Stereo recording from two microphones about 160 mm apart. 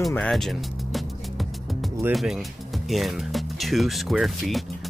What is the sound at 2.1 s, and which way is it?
Speech, centre (ahead or behind).